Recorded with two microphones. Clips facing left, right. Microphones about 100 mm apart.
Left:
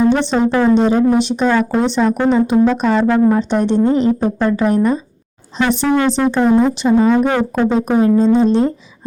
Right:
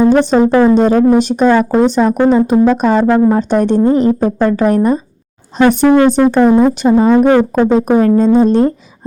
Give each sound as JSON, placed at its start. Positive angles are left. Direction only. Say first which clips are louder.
{"t": 0.0, "sound": "speech", "louder": "right 5 dB", "side_deg": -45}